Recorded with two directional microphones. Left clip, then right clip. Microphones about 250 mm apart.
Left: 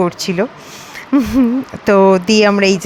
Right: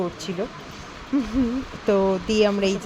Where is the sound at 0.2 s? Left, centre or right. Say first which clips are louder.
Left 12 dB; centre.